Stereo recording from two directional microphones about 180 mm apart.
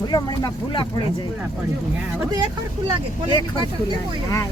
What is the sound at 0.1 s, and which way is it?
Speech, 20° left (ahead or behind).